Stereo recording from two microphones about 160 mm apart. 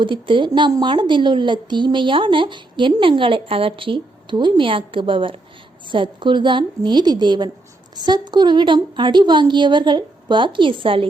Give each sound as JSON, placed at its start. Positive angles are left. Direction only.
{"t": 0.0, "sound": "a woman's voice", "side_deg": -30}